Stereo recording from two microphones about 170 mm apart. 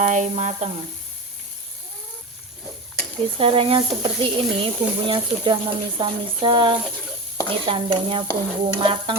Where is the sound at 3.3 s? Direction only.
30° right (ahead or behind).